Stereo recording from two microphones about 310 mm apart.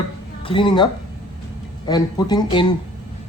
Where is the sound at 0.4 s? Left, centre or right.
Centre.